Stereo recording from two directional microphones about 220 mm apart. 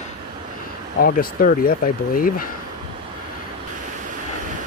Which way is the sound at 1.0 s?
40° left (ahead or behind).